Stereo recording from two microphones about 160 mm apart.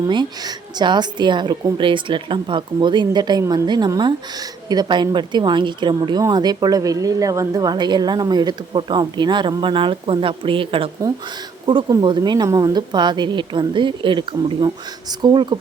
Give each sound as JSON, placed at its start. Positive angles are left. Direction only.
{"t": 0.1, "sound": "a woman's voice", "side_deg": -30}